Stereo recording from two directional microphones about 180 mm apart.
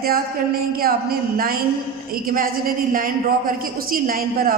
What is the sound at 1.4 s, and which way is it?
A woman's voice, 55° right (ahead or behind).